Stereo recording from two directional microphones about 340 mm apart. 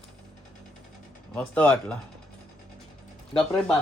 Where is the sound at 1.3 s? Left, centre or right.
Centre.